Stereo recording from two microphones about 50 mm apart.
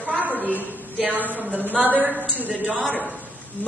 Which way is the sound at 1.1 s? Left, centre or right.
Right.